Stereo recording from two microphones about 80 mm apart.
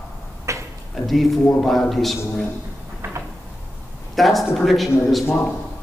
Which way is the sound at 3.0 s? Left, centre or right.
Right.